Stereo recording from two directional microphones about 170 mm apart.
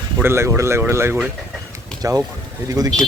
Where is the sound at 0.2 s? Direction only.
15° right (ahead or behind).